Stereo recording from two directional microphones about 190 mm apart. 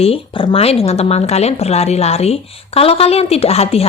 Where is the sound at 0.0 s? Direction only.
30° left (ahead or behind).